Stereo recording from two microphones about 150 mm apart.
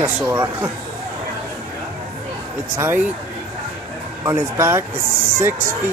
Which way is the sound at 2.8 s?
15° right (ahead or behind).